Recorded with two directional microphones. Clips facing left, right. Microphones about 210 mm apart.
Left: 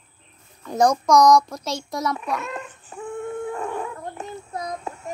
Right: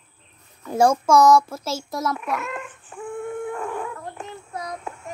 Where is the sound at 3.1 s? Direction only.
20° left (ahead or behind).